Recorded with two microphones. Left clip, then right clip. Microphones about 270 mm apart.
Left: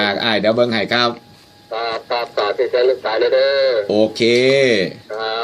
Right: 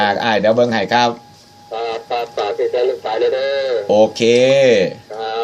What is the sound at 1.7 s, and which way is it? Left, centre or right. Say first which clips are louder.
Speech: even; centre.